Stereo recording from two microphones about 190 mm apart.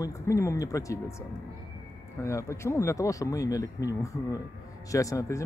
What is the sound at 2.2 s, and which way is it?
Speech, 15° left (ahead or behind).